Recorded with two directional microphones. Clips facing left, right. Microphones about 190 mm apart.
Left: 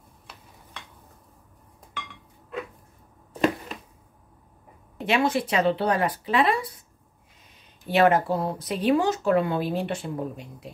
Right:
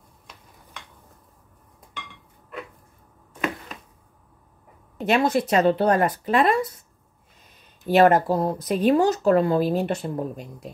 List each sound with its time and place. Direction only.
5.0 s speech: 40° right (ahead or behind)
7.8 s speech: 45° right (ahead or behind)